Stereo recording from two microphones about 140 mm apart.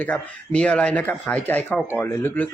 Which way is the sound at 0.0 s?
10° left (ahead or behind).